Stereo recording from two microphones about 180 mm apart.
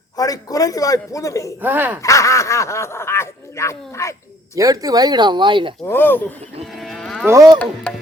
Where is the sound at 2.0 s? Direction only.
15° left (ahead or behind).